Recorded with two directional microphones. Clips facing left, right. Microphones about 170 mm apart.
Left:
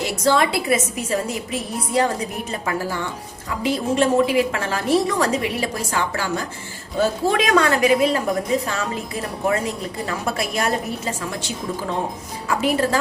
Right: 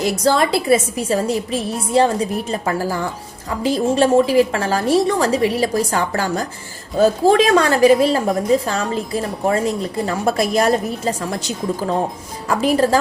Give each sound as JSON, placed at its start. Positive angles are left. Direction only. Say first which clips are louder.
{"t": 0.0, "sound": "a woman's voice", "louder": "right 2 dB", "side_deg": -40}
{"t": 10.1, "sound": "a woman's voice", "louder": "right 7 dB", "side_deg": -35}